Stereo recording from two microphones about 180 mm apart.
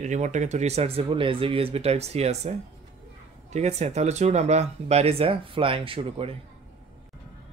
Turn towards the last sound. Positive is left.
turn(degrees=-30)  # may be behind; listen again after turning